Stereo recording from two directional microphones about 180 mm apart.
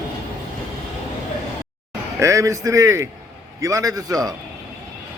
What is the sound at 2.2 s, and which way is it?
A man's voice, 15° right (ahead or behind).